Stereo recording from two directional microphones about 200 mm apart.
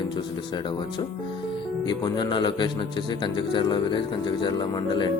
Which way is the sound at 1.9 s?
20° left (ahead or behind).